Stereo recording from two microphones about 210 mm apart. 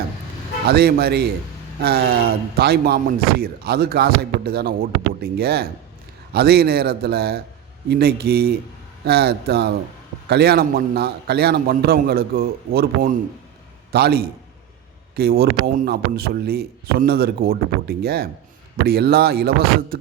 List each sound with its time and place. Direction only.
0.7 s speech: 50° right (ahead or behind)